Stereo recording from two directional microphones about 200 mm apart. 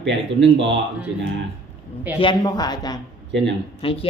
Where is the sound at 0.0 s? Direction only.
65° right (ahead or behind).